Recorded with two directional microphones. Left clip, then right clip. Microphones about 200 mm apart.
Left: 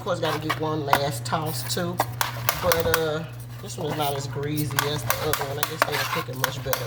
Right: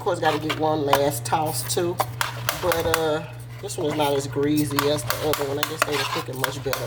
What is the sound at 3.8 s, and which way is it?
Speech, 45° right (ahead or behind).